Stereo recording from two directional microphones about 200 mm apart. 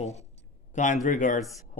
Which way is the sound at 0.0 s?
35° left (ahead or behind).